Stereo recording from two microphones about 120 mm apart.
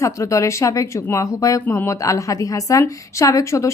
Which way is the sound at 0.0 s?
25° left (ahead or behind).